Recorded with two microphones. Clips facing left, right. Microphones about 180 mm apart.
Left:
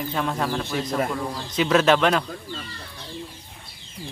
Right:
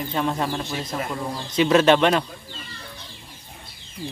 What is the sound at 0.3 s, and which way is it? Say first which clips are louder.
Speech: even; 15° right (ahead or behind).